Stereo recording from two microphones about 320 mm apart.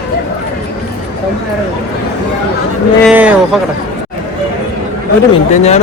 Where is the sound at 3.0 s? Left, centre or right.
Centre.